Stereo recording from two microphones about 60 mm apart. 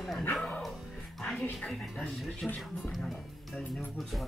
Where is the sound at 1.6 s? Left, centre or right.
Centre.